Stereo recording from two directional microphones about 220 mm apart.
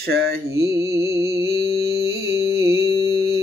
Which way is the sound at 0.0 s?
45° right (ahead or behind).